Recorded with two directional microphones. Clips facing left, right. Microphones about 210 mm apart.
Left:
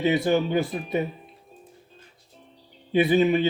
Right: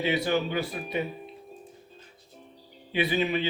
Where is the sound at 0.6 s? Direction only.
50° left (ahead or behind).